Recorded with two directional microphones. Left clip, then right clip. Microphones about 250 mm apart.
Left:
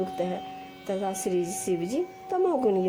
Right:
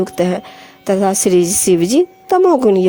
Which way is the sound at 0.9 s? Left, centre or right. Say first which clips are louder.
Right 15 dB; right.